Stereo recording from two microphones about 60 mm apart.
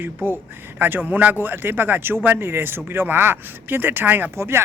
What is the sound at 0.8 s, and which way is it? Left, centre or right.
Speech, right.